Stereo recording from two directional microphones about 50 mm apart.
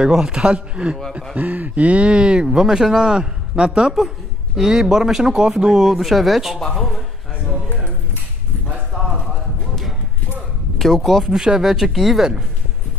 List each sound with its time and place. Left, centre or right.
0.2 s speech: centre
1.3 s speech: right; by 6.6 s centre
10.8 s speech: centre